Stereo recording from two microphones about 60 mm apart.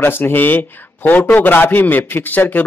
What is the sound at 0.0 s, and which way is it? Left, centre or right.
A man's voice, left.